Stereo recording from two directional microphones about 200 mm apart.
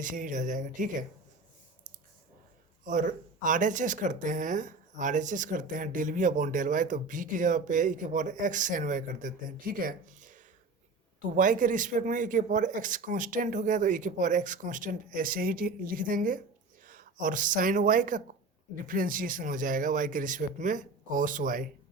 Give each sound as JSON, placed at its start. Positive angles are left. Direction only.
{"t": 0.0, "sound": "speech", "side_deg": -40}
{"t": 2.8, "sound": "speech", "side_deg": -40}
{"t": 11.3, "sound": "speech", "side_deg": -40}